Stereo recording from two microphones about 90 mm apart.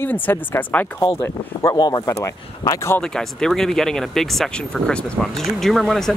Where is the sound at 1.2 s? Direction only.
40° left (ahead or behind).